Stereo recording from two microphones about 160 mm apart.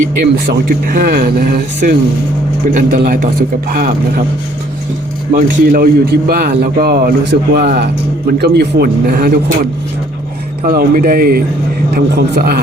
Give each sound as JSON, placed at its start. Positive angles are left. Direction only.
{"t": 0.3, "sound": "speech", "side_deg": -80}
{"t": 5.3, "sound": "a man's voice", "side_deg": -65}
{"t": 10.7, "sound": "a man's voice", "side_deg": -65}
{"t": 11.9, "sound": "a man's voice", "side_deg": -80}